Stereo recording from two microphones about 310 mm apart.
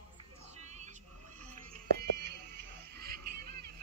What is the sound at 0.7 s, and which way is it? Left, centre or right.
Music, right.